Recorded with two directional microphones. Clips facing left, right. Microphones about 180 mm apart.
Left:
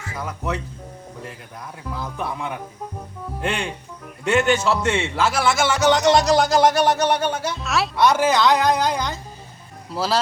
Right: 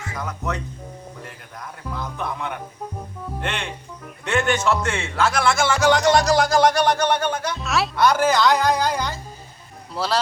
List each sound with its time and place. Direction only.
0.2 s speech: 5° left (ahead or behind)
2.0 s speech: 5° left (ahead or behind)
4.2 s speech: 5° left (ahead or behind)
4.9 s a man's voice: 25° left (ahead or behind)
5.1 s speech: 5° left (ahead or behind)